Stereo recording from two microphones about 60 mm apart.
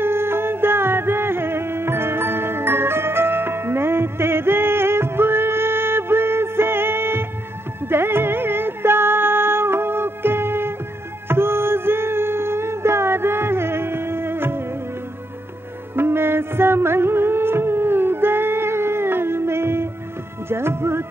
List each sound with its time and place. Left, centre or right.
0.0 s music: right
16.0 s music: right